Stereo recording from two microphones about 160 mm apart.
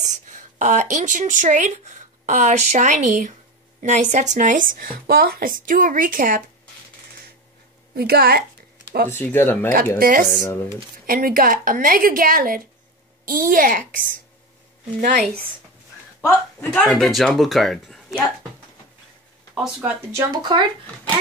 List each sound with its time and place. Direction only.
0.1 s speech: 55° right (ahead or behind)
7.9 s a woman's voice: 80° right
9.1 s speech: 15° left (ahead or behind)
9.9 s speech: 65° right (ahead or behind)
10.4 s speech: 15° left (ahead or behind)
11.1 s speech: 65° right (ahead or behind)
16.2 s speech: 15° left (ahead or behind)
16.6 s speech: centre (ahead or behind)
19.5 s speech: 5° right (ahead or behind)
20.2 s speech: 25° right (ahead or behind)